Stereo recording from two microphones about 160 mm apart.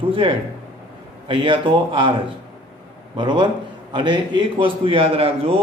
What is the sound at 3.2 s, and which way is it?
A man's voice, 30° right (ahead or behind).